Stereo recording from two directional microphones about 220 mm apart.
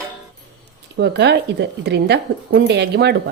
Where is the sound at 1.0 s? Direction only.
50° right (ahead or behind).